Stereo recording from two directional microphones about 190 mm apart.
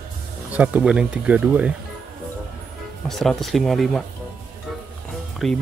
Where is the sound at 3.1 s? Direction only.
Centre (ahead or behind).